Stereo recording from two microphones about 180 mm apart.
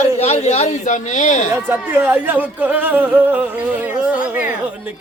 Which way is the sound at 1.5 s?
10° right (ahead or behind).